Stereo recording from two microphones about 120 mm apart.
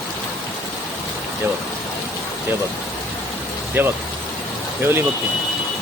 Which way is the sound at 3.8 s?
15° right (ahead or behind).